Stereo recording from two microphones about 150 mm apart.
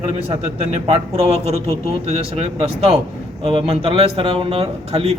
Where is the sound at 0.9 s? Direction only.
40° right (ahead or behind).